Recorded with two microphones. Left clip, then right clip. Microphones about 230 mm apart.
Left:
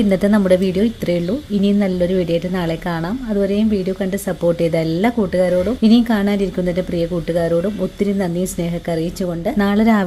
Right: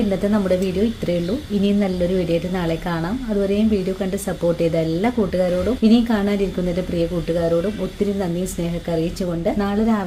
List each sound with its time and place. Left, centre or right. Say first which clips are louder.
0.1 s speech: left 7 dB; left
3.4 s speech: left 2 dB; left
9.6 s speech: left 5 dB; left